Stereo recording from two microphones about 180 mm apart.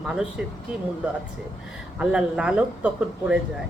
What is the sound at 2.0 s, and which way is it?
Speech, 5° right (ahead or behind).